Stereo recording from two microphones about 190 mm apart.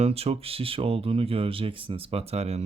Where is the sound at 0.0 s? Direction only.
30° right (ahead or behind).